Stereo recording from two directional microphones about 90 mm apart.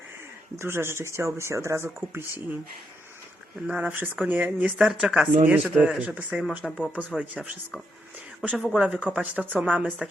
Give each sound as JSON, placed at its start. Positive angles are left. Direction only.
{"t": 0.5, "sound": "speech", "side_deg": -30}
{"t": 3.7, "sound": "speech", "side_deg": -15}
{"t": 4.8, "sound": "speech", "side_deg": -5}
{"t": 6.6, "sound": "speech", "side_deg": 5}
{"t": 7.2, "sound": "speech", "side_deg": -15}
{"t": 8.4, "sound": "speech", "side_deg": -5}